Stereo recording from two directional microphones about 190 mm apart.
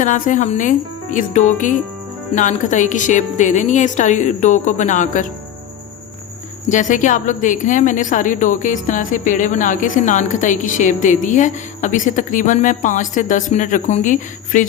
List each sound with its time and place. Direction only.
0.0 s a woman's voice: 40° left (ahead or behind)
6.7 s a woman's voice: 40° left (ahead or behind)